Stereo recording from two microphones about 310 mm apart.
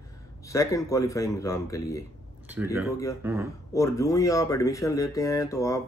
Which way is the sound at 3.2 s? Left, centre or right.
Centre.